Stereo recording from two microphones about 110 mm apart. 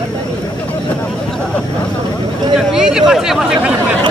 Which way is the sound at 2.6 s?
5° right (ahead or behind).